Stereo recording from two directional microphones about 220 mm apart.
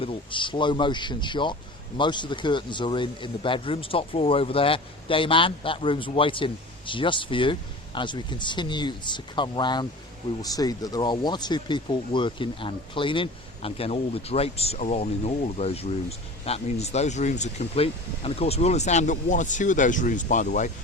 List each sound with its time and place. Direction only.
0.0 s speech: 25° left (ahead or behind)